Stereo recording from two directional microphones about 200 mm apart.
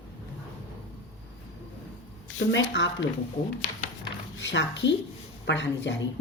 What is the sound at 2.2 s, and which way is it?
Speech, 65° left (ahead or behind).